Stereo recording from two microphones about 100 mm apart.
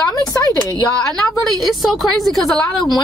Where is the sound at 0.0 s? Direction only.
35° left (ahead or behind).